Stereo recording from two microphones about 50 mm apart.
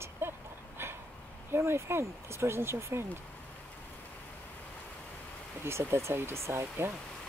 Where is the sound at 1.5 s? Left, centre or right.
Right.